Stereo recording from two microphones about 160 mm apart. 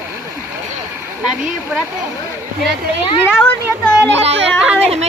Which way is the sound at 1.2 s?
5° right (ahead or behind).